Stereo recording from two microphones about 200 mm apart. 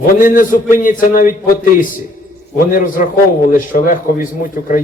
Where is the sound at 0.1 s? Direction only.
45° left (ahead or behind).